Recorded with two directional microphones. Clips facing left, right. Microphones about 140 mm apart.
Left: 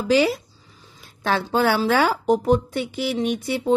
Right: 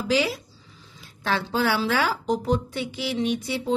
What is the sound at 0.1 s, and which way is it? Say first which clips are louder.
Speech: left 6 dB; 50° left (ahead or behind).